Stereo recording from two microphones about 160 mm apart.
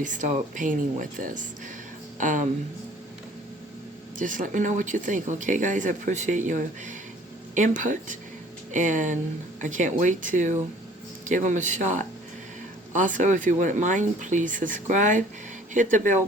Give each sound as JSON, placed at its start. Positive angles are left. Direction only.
{"t": 0.0, "sound": "speech", "side_deg": -50}
{"t": 4.2, "sound": "speech", "side_deg": -55}